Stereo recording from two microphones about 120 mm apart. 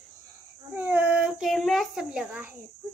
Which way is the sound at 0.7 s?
15° right (ahead or behind).